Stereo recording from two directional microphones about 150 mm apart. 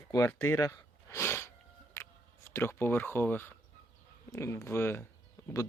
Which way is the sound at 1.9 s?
20° left (ahead or behind).